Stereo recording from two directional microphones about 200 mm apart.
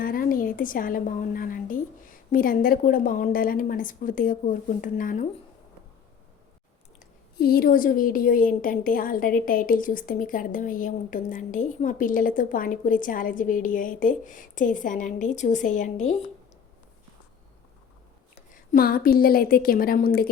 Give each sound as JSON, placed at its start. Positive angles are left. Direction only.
{"t": 0.0, "sound": "a woman's voice", "side_deg": 45}
{"t": 7.3, "sound": "a woman's voice", "side_deg": 50}
{"t": 18.7, "sound": "a woman's voice", "side_deg": 45}